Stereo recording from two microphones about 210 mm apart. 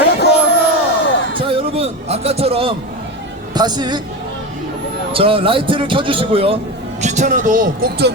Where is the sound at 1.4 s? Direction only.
25° right (ahead or behind).